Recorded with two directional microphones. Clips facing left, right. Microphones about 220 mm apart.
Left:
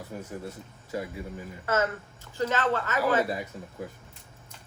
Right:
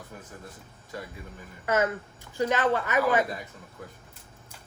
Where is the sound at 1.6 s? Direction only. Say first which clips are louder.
Right 2 dB; 15° right (ahead or behind).